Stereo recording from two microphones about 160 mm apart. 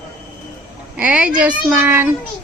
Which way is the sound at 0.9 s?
5° right (ahead or behind).